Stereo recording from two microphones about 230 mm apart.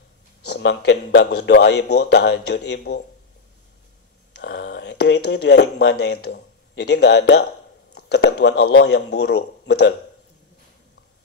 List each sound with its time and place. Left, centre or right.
0.5 s a man's voice: left
4.4 s a man's voice: left